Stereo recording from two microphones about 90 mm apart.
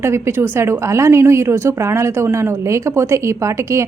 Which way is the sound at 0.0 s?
30° right (ahead or behind).